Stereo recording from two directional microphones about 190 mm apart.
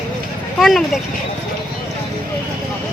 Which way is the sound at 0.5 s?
Centre (ahead or behind).